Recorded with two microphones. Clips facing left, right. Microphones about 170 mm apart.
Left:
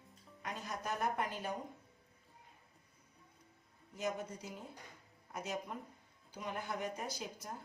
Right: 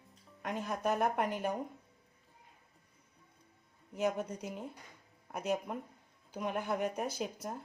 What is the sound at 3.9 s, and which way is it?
A woman's voice, 60° right (ahead or behind).